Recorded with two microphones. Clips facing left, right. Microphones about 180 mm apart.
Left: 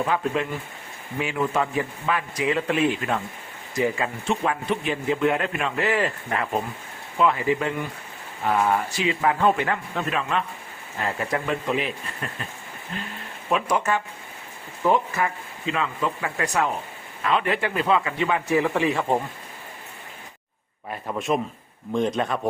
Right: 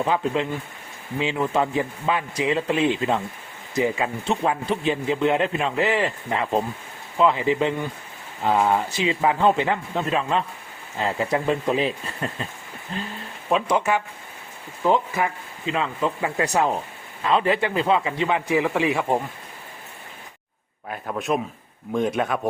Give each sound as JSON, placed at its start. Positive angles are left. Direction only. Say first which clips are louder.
{"t": 0.0, "sound": "a man's voice", "louder": "right 2 dB", "side_deg": -20}
{"t": 13.5, "sound": "a man's voice", "louder": "right 2 dB", "side_deg": -20}
{"t": 14.8, "sound": "a man's voice", "louder": "right 1 dB", "side_deg": -20}
{"t": 15.7, "sound": "a man's voice", "louder": "right 2 dB", "side_deg": -30}
{"t": 20.9, "sound": "speech", "louder": "even", "side_deg": 0}